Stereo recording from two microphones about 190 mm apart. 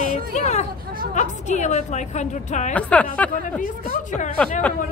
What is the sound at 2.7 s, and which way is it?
Speech, 5° left (ahead or behind).